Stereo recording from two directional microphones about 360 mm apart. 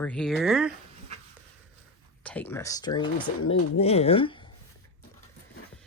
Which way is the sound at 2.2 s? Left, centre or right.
Centre.